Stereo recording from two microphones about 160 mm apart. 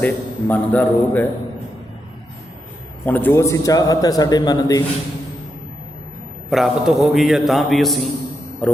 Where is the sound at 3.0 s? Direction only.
10° left (ahead or behind).